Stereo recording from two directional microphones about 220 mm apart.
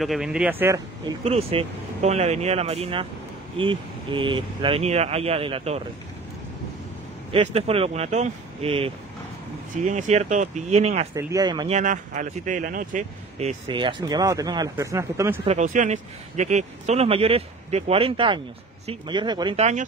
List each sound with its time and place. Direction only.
0.0 s speech: centre (ahead or behind)
1.2 s speech: 25° right (ahead or behind)
7.3 s speech: 25° right (ahead or behind)
11.1 s speech: 15° right (ahead or behind)
11.7 s speech: 35° right (ahead or behind); by 15.4 s 10° right (ahead or behind)
15.4 s speech: 35° right (ahead or behind)